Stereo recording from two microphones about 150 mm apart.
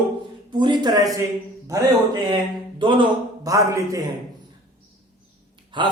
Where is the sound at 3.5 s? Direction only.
20° right (ahead or behind).